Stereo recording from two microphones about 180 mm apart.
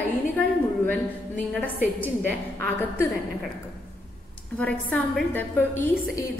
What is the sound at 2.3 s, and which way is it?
Speech, 10° left (ahead or behind).